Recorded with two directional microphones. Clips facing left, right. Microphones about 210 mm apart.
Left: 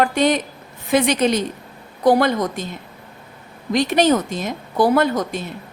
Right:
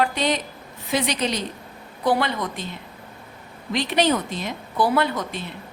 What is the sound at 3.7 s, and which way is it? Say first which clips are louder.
A woman's voice: left 5 dB; 45° left (ahead or behind).